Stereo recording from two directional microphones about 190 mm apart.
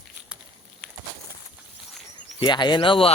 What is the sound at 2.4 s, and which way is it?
Speech, 25° left (ahead or behind).